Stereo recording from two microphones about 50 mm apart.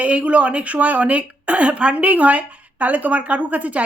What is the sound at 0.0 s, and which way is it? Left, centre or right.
Speech, right.